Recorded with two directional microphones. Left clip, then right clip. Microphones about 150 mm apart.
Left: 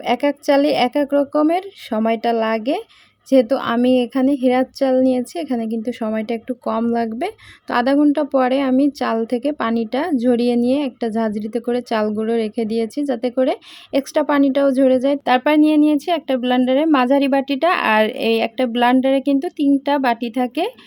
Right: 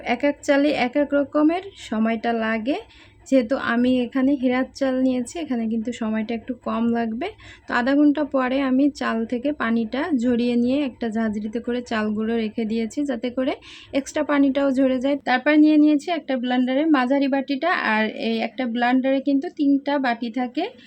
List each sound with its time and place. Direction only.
0.0 s a woman's voice: 35° left (ahead or behind); by 20.7 s 50° left (ahead or behind)